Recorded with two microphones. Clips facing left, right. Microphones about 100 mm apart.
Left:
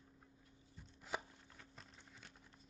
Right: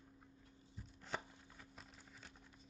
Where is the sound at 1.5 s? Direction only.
5° right (ahead or behind).